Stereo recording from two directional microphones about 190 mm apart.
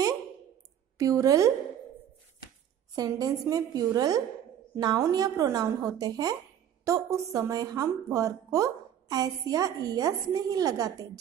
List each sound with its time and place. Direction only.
0.9 s a woman's voice: 15° right (ahead or behind)
3.0 s a woman's voice: 20° right (ahead or behind)